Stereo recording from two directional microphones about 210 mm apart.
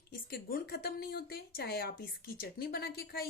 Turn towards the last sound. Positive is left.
turn(degrees=50)  # may be behind; listen again after turning